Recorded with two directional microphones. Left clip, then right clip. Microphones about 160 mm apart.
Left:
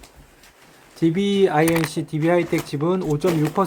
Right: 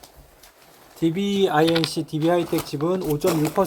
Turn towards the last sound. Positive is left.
turn(degrees=10)  # may be behind; listen again after turning